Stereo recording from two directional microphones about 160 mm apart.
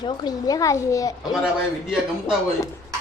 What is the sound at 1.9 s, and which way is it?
Speech, 5° right (ahead or behind).